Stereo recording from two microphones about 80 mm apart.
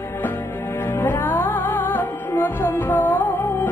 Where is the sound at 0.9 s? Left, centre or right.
Left.